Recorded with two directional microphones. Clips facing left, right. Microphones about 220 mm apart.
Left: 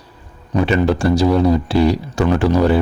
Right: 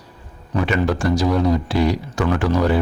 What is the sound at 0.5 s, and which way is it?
Speech, 30° left (ahead or behind).